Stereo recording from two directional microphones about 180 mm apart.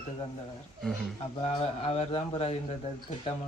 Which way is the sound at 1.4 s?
35° left (ahead or behind).